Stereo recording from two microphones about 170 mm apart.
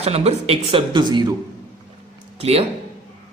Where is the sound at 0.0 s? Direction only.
40° right (ahead or behind).